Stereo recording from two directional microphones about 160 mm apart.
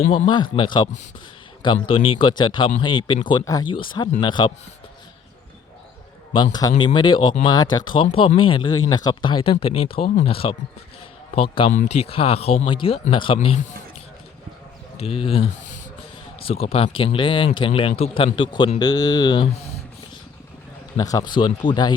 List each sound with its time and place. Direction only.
0.1 s speech: 30° left (ahead or behind)
6.3 s speech: 30° left (ahead or behind)
8.0 s speech: 40° left (ahead or behind)
11.7 s speech: 50° left (ahead or behind)
14.9 s speech: 40° left (ahead or behind)
20.9 s speech: 25° left (ahead or behind)